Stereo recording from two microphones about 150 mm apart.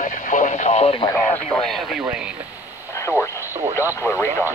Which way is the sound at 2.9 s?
20° left (ahead or behind).